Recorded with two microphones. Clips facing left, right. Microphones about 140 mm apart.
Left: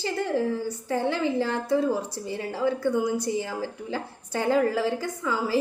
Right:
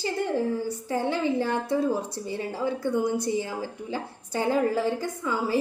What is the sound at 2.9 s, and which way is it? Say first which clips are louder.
Speech: even; 55° right (ahead or behind).